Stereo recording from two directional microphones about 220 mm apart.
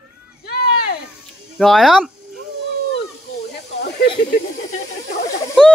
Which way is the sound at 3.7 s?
50° left (ahead or behind).